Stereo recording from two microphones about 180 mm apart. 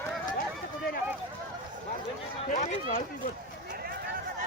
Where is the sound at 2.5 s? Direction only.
45° left (ahead or behind).